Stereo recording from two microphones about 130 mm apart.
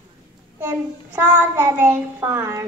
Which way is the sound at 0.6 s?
15° right (ahead or behind).